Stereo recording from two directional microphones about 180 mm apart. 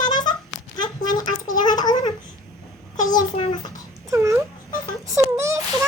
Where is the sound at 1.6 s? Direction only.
20° left (ahead or behind).